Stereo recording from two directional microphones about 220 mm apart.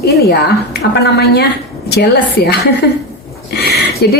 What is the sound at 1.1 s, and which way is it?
A woman's voice, 45° left (ahead or behind).